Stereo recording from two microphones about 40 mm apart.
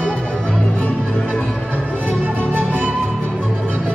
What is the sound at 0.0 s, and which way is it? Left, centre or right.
Music, left.